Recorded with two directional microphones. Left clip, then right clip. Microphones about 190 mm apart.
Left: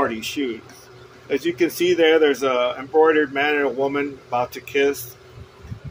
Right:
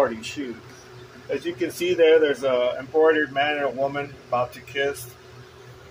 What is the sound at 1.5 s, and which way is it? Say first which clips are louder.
Speech: left 2 dB; 55° left (ahead or behind).